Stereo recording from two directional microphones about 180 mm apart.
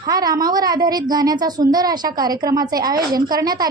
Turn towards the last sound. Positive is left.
turn(degrees=-20)  # may be behind; listen again after turning